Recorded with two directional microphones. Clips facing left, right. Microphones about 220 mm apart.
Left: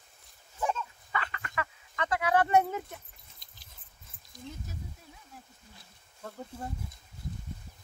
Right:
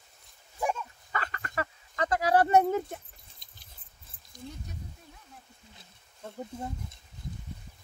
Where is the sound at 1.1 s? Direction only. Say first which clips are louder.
Right 2 dB; 40° right (ahead or behind).